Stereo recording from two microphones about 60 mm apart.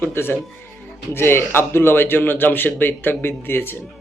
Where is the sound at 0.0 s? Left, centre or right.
Left.